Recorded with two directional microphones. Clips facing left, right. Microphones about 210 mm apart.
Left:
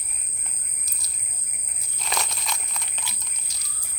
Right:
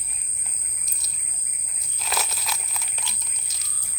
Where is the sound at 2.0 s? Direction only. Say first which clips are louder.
Even; 5° right (ahead or behind).